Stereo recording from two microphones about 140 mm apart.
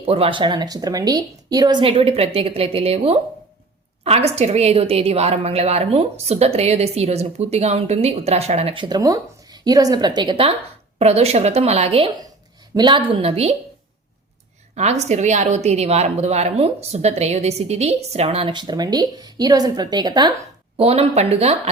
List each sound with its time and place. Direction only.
0.0 s a woman's voice: 45° right (ahead or behind); by 1.8 s 25° right (ahead or behind)
1.8 s a woman's voice: 45° right (ahead or behind)
9.0 s a woman's voice: 25° right (ahead or behind)
10.9 s a woman's voice: 50° right (ahead or behind)
12.7 s a woman's voice: 35° right (ahead or behind)
14.8 s a woman's voice: 55° right (ahead or behind); by 20.3 s 30° right (ahead or behind)
20.7 s a woman's voice: 45° right (ahead or behind)